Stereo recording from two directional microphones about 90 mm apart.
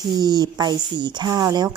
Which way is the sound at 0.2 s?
50° right (ahead or behind).